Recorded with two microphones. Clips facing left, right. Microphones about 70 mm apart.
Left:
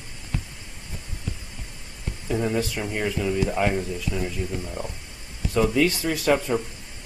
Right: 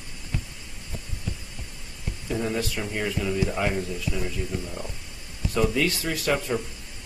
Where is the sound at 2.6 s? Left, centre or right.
Left.